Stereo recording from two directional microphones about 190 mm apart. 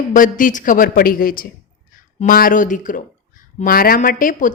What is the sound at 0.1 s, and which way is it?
A woman's voice, 45° left (ahead or behind).